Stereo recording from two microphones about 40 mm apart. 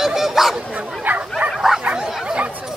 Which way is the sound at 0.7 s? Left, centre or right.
Right.